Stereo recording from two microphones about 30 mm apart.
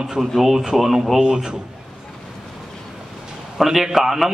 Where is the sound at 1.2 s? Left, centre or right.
Right.